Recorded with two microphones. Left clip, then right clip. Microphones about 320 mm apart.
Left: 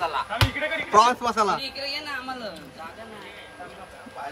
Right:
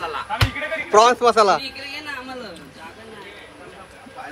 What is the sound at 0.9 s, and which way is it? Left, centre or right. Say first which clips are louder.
Speech: right 6 dB; centre.